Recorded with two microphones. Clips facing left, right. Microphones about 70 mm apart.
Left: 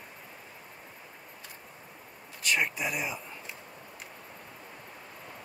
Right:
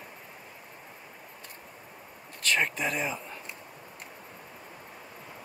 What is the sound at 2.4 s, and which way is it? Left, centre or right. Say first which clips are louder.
Speech: right 1 dB; centre.